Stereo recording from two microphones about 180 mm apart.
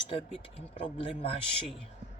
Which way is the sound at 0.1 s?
30° left (ahead or behind).